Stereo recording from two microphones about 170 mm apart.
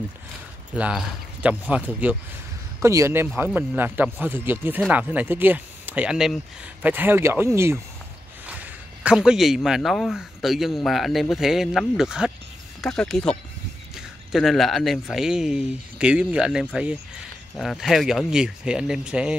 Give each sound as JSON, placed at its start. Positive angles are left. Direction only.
{"t": 0.7, "sound": "speech", "side_deg": -5}